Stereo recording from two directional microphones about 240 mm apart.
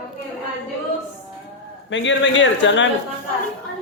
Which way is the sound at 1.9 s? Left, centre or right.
Left.